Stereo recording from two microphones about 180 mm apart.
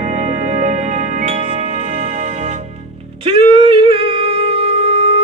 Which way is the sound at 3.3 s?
30° right (ahead or behind).